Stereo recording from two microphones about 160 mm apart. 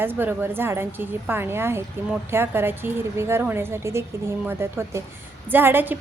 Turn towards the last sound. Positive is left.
turn(degrees=-15)  # may be behind; listen again after turning